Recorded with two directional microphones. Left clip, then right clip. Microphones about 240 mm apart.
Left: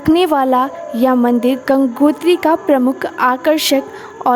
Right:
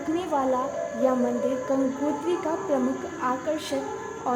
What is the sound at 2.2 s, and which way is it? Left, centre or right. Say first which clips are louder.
A woman's voice: left 14 dB; left.